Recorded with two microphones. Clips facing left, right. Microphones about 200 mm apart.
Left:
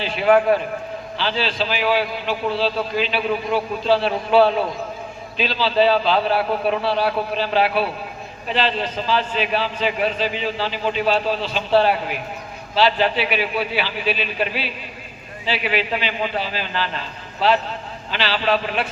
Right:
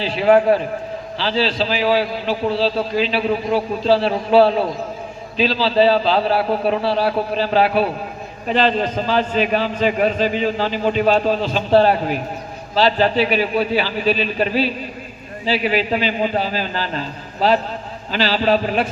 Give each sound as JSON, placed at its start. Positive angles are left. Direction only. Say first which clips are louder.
{"t": 0.0, "sound": "a man's voice", "louder": "right 2 dB", "side_deg": -35}